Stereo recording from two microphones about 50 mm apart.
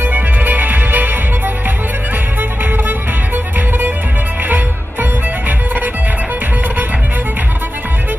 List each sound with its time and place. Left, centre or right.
0.0 s music: right